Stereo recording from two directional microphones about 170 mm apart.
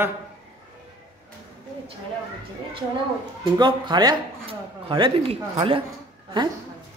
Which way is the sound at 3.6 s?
25° right (ahead or behind).